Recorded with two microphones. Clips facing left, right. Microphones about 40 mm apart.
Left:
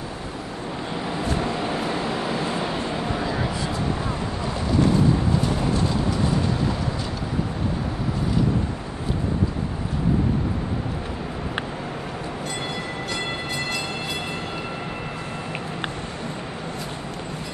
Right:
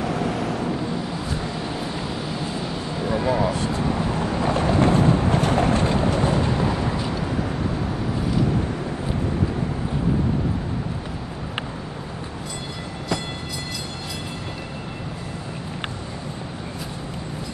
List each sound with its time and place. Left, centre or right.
1.4 s vehicle: left
4.4 s vehicle: right